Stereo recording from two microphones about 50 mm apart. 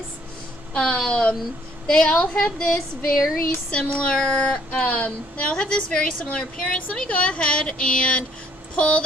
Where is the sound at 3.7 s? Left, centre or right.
Centre.